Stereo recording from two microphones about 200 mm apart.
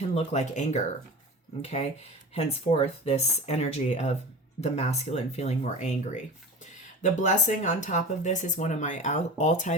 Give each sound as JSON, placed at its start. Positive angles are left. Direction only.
{"t": 0.1, "sound": "speech", "side_deg": 35}
{"t": 2.3, "sound": "speech", "side_deg": 30}